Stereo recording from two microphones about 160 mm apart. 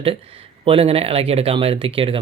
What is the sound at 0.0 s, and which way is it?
Speech, 35° right (ahead or behind).